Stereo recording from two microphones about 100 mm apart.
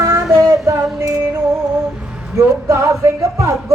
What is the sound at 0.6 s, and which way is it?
Female singing, 30° right (ahead or behind).